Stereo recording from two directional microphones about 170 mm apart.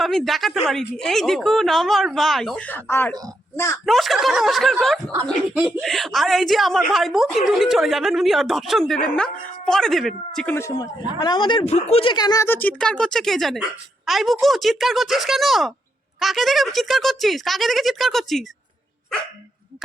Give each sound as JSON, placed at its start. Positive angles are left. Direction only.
{"t": 0.0, "sound": "a woman's voice", "side_deg": 0}
{"t": 3.8, "sound": "a woman's voice", "side_deg": 0}
{"t": 10.5, "sound": "speech", "side_deg": 20}
{"t": 12.1, "sound": "a woman's voice", "side_deg": 20}